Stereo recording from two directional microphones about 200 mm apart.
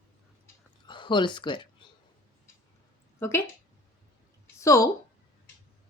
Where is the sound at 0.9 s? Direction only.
25° left (ahead or behind).